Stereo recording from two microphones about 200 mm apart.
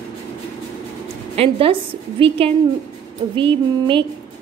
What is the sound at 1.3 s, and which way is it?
A woman's voice, 30° right (ahead or behind).